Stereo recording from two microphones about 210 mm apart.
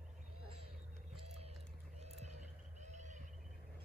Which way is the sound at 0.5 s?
30° right (ahead or behind).